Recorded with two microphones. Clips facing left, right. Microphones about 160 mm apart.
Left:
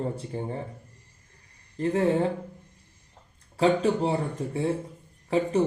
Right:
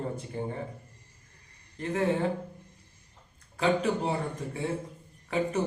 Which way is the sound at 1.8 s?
35° left (ahead or behind).